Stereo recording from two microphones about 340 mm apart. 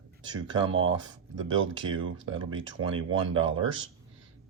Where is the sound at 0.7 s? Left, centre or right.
Right.